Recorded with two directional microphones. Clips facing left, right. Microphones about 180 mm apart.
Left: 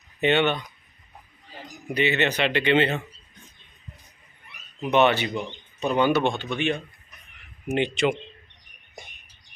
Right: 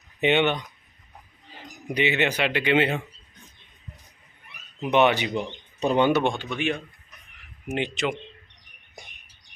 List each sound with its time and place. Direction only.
0.2 s speech: 15° right (ahead or behind)
1.9 s speech: 15° right (ahead or behind)
4.8 s speech: 15° right (ahead or behind)